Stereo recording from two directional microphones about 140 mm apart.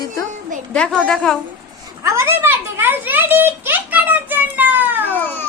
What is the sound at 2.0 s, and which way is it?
A child's voice, 20° right (ahead or behind).